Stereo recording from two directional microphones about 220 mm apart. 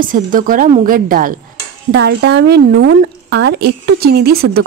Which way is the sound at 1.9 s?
50° right (ahead or behind).